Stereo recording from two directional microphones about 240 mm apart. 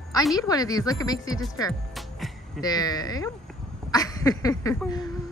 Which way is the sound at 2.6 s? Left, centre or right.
Centre.